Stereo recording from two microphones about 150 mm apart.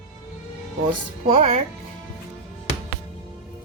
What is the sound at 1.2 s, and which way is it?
Speech, 45° right (ahead or behind).